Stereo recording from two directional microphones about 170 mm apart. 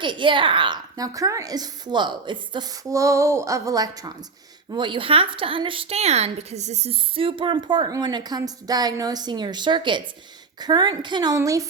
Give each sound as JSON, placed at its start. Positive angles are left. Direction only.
{"t": 0.0, "sound": "a woman's voice", "side_deg": -30}